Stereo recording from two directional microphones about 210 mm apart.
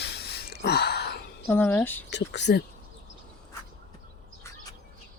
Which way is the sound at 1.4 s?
10° left (ahead or behind).